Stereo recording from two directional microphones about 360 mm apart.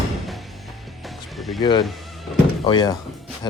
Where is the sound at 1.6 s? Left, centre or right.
Centre.